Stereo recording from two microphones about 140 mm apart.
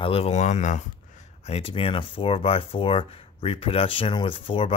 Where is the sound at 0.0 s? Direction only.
45° left (ahead or behind).